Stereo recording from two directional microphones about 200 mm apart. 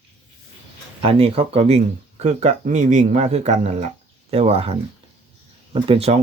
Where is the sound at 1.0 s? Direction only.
30° right (ahead or behind).